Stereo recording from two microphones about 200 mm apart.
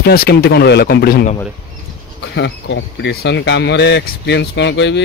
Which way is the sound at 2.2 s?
65° left (ahead or behind).